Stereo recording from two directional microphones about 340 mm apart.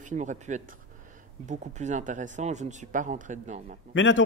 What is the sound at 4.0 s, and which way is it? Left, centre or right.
Speech, left.